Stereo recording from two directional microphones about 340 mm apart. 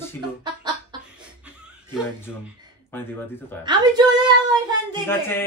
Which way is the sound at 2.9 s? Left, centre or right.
Centre.